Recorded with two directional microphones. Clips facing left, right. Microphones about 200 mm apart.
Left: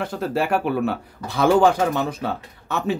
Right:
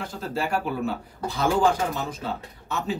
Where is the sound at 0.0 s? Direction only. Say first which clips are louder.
Left 6 dB; 65° left (ahead or behind).